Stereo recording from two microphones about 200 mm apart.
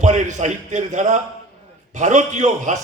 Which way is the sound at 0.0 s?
35° right (ahead or behind).